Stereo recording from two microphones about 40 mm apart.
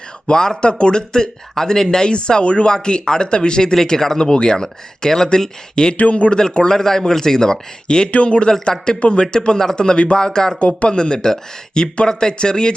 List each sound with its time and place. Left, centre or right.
0.3 s a man's voice: centre
6.0 s a man's voice: left
6.7 s a man's voice: centre; by 8.4 s left
8.4 s speech: centre
9.0 s a man's voice: left
10.6 s a man's voice: left
10.9 s a man's voice: left